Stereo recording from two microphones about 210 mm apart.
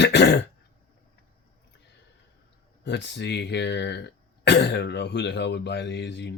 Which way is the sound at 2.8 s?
55° left (ahead or behind).